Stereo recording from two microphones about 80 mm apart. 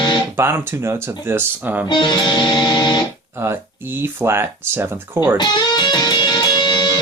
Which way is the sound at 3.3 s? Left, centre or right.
Right.